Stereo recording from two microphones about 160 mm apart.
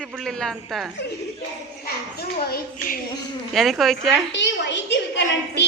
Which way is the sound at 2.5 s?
65° left (ahead or behind).